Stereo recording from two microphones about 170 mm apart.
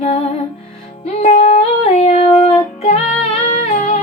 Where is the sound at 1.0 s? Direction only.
40° left (ahead or behind).